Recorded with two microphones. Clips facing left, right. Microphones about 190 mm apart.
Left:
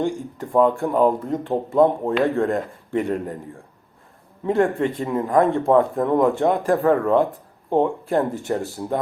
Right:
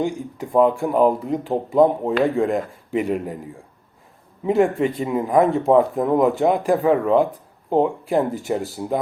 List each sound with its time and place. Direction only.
0.0 s a man's voice: centre (ahead or behind)
4.4 s a man's voice: 5° right (ahead or behind)